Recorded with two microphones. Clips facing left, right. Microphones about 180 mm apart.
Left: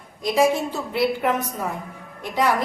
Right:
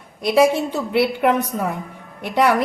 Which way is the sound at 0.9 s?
70° right (ahead or behind).